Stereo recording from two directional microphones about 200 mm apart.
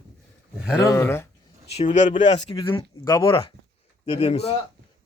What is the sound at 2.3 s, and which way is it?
Speech, 20° left (ahead or behind).